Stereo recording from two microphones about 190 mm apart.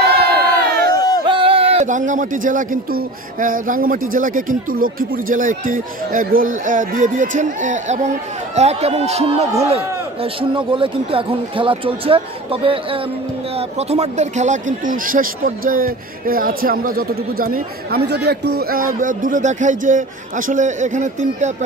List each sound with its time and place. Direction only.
0.0 s crowd: 55° right (ahead or behind)
0.9 s a sound: 20° left (ahead or behind)
1.2 s speech: 25° right (ahead or behind)
10.5 s speech: 25° right (ahead or behind)
13.6 s speech: 35° right (ahead or behind)